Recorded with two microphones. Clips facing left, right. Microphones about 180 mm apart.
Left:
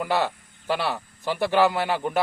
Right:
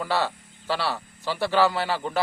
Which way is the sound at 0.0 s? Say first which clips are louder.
Left 2 dB; 15° left (ahead or behind).